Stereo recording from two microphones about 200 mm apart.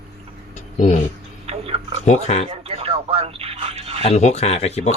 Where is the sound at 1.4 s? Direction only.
30° right (ahead or behind).